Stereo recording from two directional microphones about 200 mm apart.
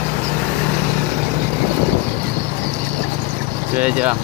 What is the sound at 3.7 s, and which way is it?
Speech, 10° right (ahead or behind).